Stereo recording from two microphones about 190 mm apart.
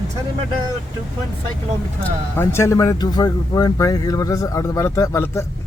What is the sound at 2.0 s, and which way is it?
Speech, 15° left (ahead or behind).